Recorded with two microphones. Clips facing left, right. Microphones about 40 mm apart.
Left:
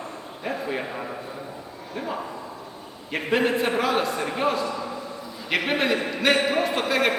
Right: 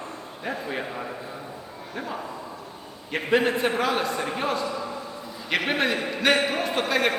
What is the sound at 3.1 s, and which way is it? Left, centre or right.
A man's voice, centre.